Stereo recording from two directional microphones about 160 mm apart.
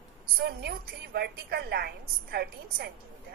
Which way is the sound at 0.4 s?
80° right.